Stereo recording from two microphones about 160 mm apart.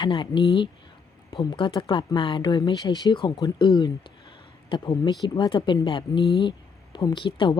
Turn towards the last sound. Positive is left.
turn(degrees=30)  # may be behind; listen again after turning